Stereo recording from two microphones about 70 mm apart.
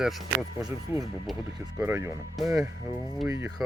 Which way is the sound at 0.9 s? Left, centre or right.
Right.